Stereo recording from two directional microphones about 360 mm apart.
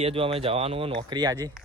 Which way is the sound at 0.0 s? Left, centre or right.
Centre.